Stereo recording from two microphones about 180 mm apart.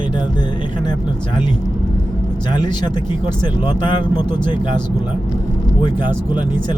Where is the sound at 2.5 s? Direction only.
25° left (ahead or behind).